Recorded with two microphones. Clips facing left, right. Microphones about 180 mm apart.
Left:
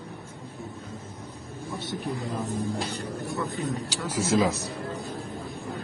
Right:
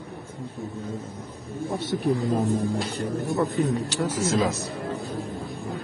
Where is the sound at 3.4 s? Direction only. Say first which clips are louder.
Right 7 dB; 40° right (ahead or behind).